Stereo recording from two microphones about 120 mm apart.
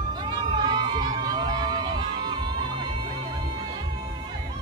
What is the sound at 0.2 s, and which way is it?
Run, 40° right (ahead or behind).